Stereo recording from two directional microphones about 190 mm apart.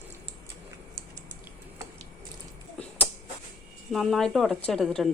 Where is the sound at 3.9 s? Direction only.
Centre (ahead or behind).